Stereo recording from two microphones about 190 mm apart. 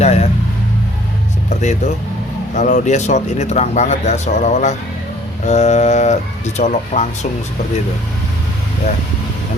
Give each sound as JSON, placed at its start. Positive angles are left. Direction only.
{"t": 0.0, "sound": "speech", "side_deg": 35}
{"t": 2.6, "sound": "speech", "side_deg": 40}